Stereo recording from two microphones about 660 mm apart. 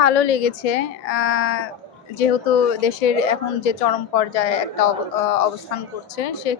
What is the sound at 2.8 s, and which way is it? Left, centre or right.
Speech, left.